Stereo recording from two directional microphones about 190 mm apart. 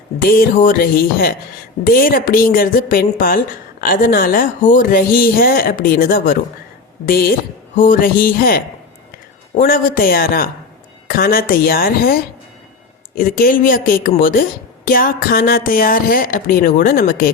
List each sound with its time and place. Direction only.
0.2 s a man's voice: 50° left (ahead or behind)